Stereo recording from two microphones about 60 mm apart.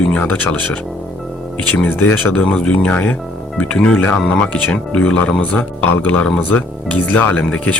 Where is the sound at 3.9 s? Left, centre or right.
Left.